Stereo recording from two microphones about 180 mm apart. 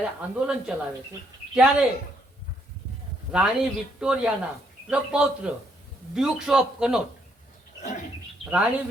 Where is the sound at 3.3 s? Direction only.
Centre (ahead or behind).